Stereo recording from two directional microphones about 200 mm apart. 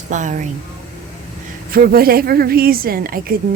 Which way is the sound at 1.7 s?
50° right (ahead or behind).